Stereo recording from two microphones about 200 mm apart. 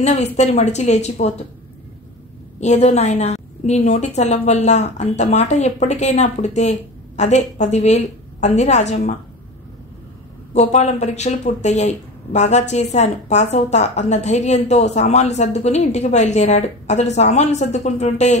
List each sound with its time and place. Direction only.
0.0 s speech: 35° left (ahead or behind)
2.6 s speech: 35° left (ahead or behind)
10.5 s speech: 35° left (ahead or behind)